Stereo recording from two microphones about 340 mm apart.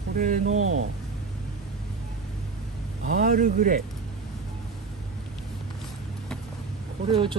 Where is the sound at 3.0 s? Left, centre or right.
Right.